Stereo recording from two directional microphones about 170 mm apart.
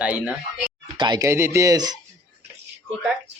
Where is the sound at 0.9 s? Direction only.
25° right (ahead or behind).